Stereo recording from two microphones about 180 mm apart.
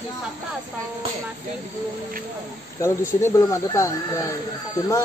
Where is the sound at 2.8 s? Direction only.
15° left (ahead or behind).